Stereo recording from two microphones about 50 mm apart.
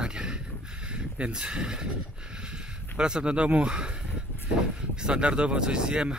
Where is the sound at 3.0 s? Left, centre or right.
Centre.